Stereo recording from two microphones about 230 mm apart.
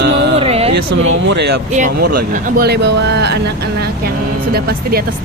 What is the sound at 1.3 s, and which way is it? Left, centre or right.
Speech, right.